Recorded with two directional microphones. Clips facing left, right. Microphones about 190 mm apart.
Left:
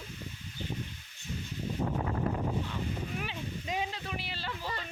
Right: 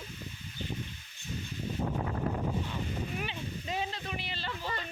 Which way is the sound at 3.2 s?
10° left (ahead or behind).